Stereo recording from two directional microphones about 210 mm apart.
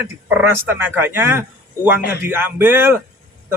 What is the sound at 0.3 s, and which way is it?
Speech, 10° right (ahead or behind).